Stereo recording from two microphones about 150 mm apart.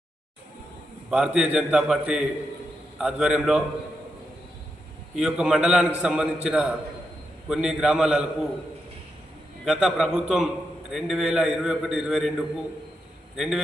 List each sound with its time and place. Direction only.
1.1 s a man's voice: 5° right (ahead or behind)
5.1 s a man's voice: 5° right (ahead or behind)
9.6 s a man's voice: 5° right (ahead or behind)